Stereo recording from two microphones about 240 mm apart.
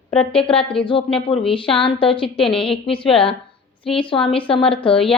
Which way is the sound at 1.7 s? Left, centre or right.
Left.